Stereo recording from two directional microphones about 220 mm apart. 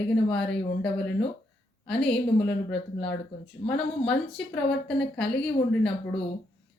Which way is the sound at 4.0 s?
5° left (ahead or behind).